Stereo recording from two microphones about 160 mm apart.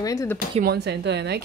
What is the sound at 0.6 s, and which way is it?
Speech, 90° right.